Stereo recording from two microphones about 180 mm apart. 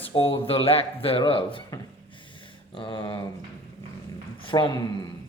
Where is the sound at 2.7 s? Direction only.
30° left (ahead or behind).